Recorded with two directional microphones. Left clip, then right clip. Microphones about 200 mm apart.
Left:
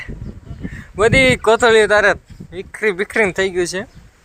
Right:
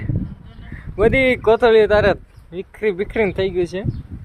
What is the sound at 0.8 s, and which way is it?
Speech, 5° right (ahead or behind).